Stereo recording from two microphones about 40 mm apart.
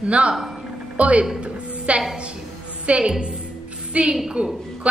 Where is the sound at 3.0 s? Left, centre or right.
Centre.